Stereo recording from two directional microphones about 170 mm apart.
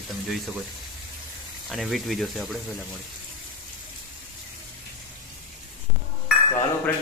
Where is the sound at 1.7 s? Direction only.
Centre (ahead or behind).